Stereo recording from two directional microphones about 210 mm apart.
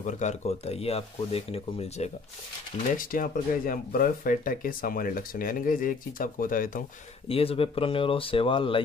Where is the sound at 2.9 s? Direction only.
40° left (ahead or behind).